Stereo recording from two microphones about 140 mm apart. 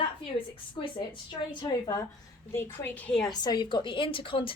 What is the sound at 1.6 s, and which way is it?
Speech, 25° left (ahead or behind).